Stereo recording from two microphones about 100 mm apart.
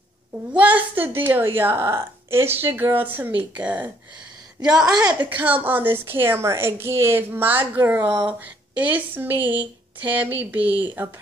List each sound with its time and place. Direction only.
0.5 s a woman's voice: 15° right (ahead or behind)